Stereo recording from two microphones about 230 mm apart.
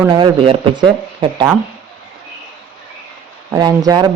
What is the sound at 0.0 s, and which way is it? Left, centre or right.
Speech, centre.